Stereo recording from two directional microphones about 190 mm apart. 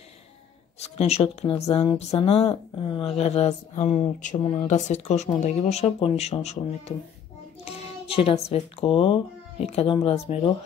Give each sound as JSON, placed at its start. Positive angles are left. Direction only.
{"t": 0.7, "sound": "speech", "side_deg": 35}
{"t": 7.6, "sound": "child singing", "side_deg": 30}
{"t": 8.5, "sound": "speech", "side_deg": 30}